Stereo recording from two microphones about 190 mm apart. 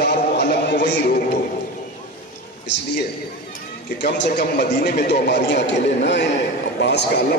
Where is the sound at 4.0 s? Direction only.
65° left (ahead or behind).